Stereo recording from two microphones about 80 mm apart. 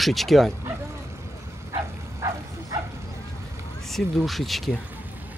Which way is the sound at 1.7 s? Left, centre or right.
Right.